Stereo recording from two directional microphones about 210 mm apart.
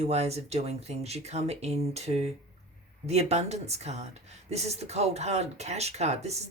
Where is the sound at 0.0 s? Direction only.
30° right (ahead or behind).